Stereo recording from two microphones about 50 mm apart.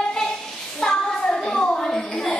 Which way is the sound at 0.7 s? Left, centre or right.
Centre.